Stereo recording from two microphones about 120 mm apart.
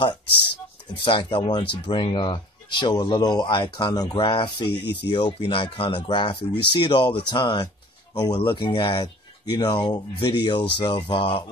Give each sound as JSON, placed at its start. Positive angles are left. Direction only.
{"t": 1.0, "sound": "speech", "side_deg": 45}
{"t": 4.2, "sound": "speech", "side_deg": 45}
{"t": 8.4, "sound": "speech", "side_deg": 45}